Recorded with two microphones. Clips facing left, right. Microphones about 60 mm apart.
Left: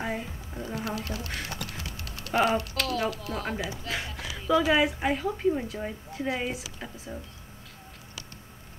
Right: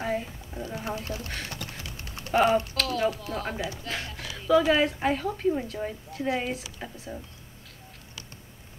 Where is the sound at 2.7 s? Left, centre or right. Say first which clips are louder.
Right 2 dB; centre.